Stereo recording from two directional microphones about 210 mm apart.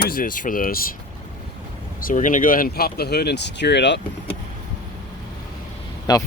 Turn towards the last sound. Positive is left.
turn(degrees=20)  # may be behind; listen again after turning